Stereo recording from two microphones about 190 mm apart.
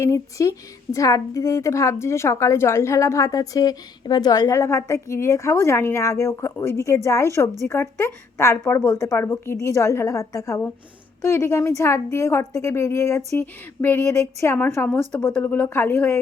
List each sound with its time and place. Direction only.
0.0 s a woman's voice: 15° left (ahead or behind)